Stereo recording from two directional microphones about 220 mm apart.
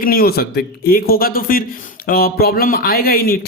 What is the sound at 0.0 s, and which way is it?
Speech, 45° left (ahead or behind).